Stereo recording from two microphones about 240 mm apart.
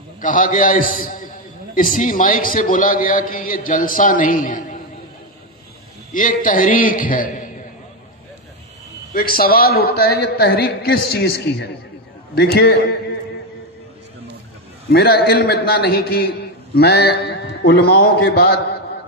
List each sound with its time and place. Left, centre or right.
0.2 s a man's voice: left
6.1 s a man's voice: left
9.1 s a man's voice: left
14.9 s a man's voice: left